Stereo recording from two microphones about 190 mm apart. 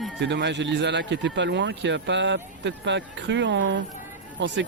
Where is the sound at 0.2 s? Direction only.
65° right (ahead or behind).